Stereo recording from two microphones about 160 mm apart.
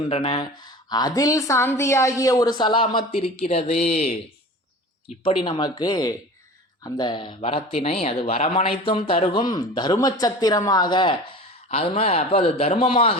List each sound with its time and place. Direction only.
0.2 s a woman's voice: 30° left (ahead or behind)
5.2 s a woman's voice: 30° left (ahead or behind)